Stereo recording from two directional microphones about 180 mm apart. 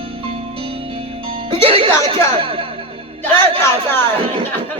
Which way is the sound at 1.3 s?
30° right (ahead or behind).